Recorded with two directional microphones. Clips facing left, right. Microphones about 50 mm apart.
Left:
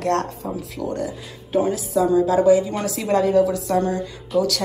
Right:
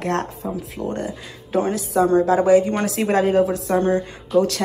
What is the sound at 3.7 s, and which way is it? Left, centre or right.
Speech, right.